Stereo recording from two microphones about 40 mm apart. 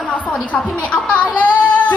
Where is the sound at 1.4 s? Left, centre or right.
Left.